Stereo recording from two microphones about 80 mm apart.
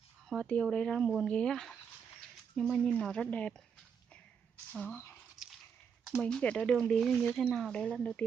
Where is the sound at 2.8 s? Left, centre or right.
Centre.